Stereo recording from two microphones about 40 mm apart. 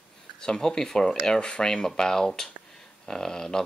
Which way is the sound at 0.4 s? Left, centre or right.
Centre.